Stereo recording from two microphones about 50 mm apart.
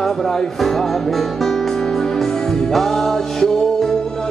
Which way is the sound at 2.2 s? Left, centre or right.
Centre.